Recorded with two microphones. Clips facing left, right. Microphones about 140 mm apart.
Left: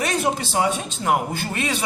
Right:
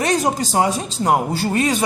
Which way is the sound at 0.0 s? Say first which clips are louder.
Right 4 dB; 40° right (ahead or behind).